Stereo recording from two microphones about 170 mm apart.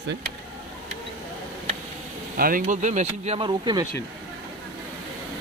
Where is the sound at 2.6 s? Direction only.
45° right (ahead or behind).